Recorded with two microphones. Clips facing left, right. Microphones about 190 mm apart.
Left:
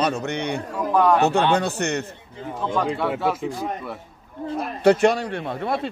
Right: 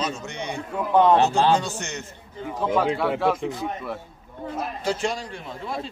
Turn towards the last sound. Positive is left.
turn(degrees=60)  # may be behind; listen again after turning